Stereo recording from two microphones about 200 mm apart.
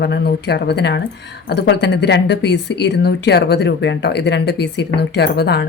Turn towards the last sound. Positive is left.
turn(degrees=55)  # may be behind; listen again after turning